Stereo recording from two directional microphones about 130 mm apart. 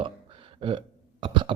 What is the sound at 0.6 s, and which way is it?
Burping, 40° right (ahead or behind).